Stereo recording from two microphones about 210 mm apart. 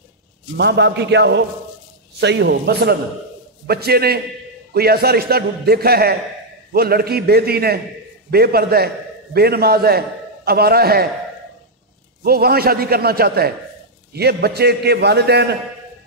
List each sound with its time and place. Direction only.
0.6 s a man's voice: 55° right (ahead or behind)
12.2 s a man's voice: 45° right (ahead or behind)